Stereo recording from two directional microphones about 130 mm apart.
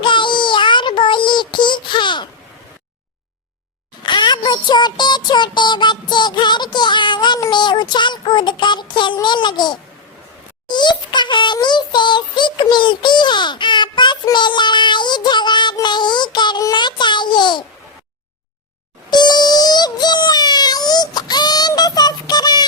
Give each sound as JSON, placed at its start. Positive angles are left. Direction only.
{"t": 0.0, "sound": "child singing", "side_deg": 40}
{"t": 4.0, "sound": "a sound", "side_deg": 35}
{"t": 10.7, "sound": "synthetic singing", "side_deg": 35}
{"t": 19.1, "sound": "music", "side_deg": 35}